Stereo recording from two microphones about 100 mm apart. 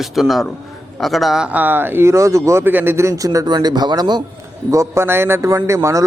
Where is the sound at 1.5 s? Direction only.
20° right (ahead or behind).